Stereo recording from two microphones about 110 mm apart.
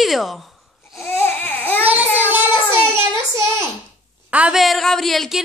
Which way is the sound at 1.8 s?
15° right (ahead or behind).